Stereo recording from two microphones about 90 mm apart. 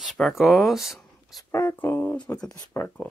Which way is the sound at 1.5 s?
25° left (ahead or behind).